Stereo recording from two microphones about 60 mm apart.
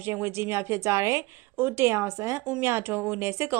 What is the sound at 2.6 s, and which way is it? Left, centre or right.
Speech, right.